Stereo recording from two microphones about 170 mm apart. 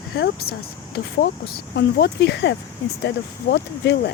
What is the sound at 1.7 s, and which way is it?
Speech, 85° left.